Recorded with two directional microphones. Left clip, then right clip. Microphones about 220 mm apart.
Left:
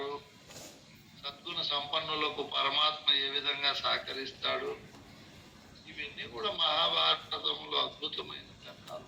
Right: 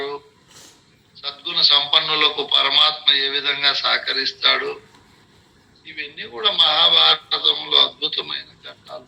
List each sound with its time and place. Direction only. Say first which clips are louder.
1.2 s a man's voice: right 18 dB; 30° right (ahead or behind)
5.8 s speech: right 10 dB; 30° right (ahead or behind)